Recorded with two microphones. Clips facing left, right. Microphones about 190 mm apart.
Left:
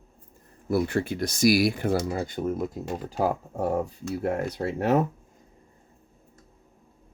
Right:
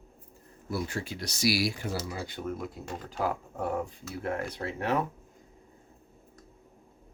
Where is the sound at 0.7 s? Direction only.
60° left (ahead or behind); by 5.0 s 40° left (ahead or behind).